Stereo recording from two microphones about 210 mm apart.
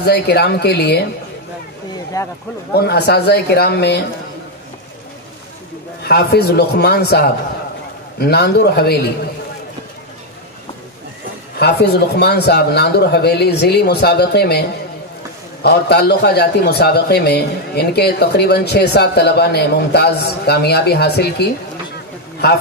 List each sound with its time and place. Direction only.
0.0 s a man's voice: 50° left (ahead or behind)
2.1 s speech: 15° left (ahead or behind)
2.7 s a man's voice: 50° left (ahead or behind)
6.0 s a man's voice: 50° left (ahead or behind)
11.6 s a man's voice: 50° left (ahead or behind)
15.6 s a man's voice: 50° left (ahead or behind)